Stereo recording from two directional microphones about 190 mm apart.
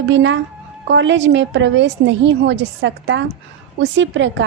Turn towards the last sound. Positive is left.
turn(degrees=-75)  # may be behind; listen again after turning